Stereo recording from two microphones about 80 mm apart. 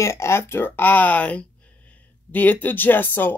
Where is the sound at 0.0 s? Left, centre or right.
Left.